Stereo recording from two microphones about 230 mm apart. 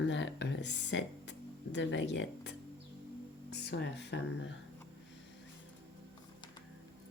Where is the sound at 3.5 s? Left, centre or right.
Left.